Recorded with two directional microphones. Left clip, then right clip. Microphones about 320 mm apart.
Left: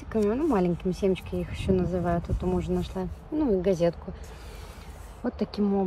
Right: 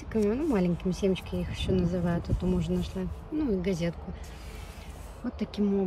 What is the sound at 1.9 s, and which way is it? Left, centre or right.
Speech, left.